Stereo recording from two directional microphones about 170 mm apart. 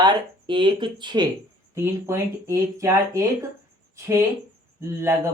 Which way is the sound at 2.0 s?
15° right (ahead or behind).